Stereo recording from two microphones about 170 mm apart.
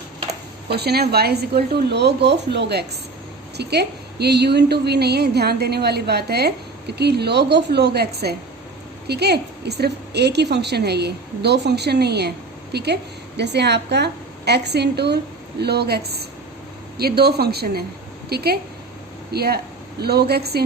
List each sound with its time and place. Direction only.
0.7 s a woman's voice: 70° right (ahead or behind)